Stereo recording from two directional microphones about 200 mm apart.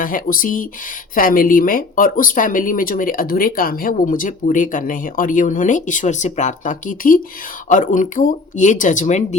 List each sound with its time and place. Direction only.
0.0 s speech: 45° left (ahead or behind)